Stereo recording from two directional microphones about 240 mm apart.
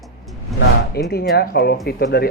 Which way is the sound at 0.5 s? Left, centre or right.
Centre.